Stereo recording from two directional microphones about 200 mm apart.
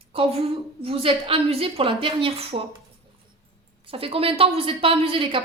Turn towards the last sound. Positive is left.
turn(degrees=-25)  # may be behind; listen again after turning